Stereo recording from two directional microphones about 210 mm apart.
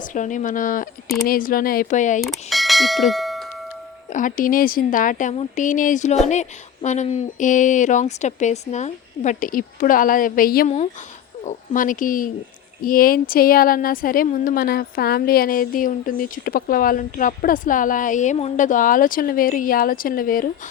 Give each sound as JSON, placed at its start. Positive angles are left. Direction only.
{"t": 0.0, "sound": "speech", "side_deg": 35}
{"t": 2.2, "sound": "speech", "side_deg": 0}
{"t": 4.1, "sound": "a woman's voice", "side_deg": 40}